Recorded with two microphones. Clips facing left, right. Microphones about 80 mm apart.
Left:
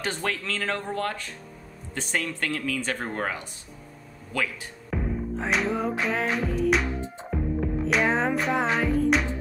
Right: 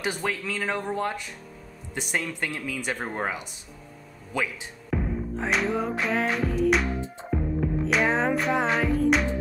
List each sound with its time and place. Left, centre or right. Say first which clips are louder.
0.0 s speech: right 1 dB; centre
4.9 s music: right 1 dB; centre